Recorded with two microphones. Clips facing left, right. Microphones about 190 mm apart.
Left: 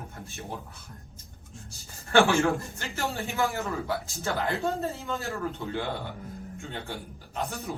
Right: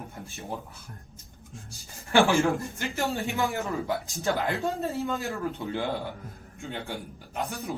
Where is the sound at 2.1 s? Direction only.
15° right (ahead or behind).